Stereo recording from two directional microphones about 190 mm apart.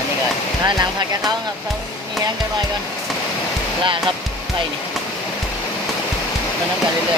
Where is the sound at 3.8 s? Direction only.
25° right (ahead or behind).